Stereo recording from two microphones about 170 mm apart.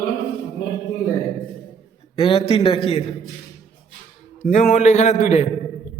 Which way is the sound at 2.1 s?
35° left (ahead or behind).